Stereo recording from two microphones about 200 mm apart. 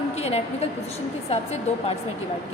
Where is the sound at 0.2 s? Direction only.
30° left (ahead or behind).